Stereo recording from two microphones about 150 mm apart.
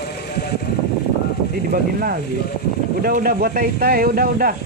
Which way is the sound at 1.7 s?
75° right (ahead or behind).